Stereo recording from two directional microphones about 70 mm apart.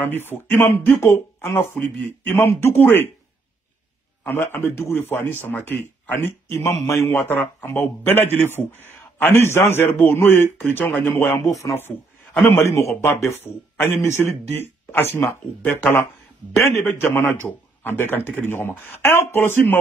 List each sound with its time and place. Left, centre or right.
0.1 s a man's voice: left
4.3 s a man's voice: left
7.2 s a man's voice: left
12.6 s a man's voice: left
16.5 s a man's voice: left
16.8 s a man's voice: left